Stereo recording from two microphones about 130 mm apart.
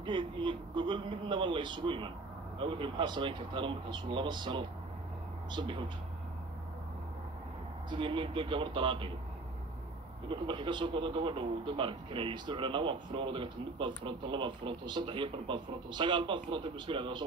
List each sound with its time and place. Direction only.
0.0 s a man's voice: 40° right (ahead or behind)
7.9 s a man's voice: 40° right (ahead or behind)
10.2 s a man's voice: 40° right (ahead or behind)